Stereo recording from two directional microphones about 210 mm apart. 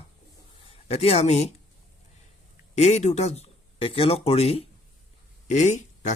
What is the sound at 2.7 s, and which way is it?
Speech, 35° left (ahead or behind).